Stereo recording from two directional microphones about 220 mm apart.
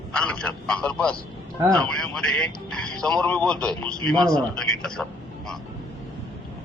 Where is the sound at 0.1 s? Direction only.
5° left (ahead or behind).